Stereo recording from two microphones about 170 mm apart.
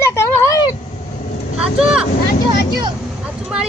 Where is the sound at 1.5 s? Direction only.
5° right (ahead or behind).